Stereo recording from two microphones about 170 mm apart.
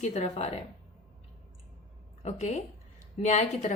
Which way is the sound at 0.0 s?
40° left (ahead or behind).